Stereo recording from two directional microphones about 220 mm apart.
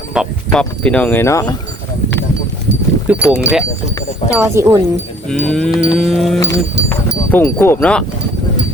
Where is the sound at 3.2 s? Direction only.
15° left (ahead or behind).